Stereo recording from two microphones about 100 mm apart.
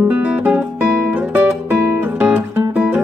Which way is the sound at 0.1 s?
15° right (ahead or behind).